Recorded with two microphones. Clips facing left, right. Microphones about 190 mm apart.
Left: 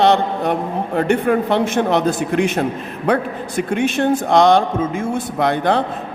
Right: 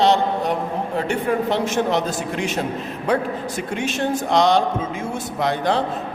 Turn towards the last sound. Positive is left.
turn(degrees=55)  # may be behind; listen again after turning